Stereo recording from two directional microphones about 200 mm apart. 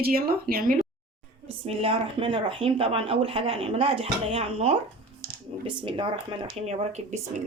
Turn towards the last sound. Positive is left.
turn(degrees=-35)  # may be behind; listen again after turning